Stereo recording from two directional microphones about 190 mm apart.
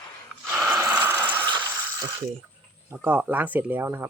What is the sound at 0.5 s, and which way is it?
Gasp, centre (ahead or behind).